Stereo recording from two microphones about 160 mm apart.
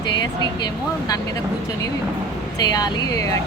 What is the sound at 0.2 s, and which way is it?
Speech, 25° left (ahead or behind).